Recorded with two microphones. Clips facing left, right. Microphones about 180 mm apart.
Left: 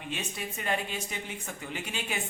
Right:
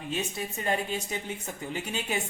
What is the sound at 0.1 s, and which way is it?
A man's voice, 40° right (ahead or behind).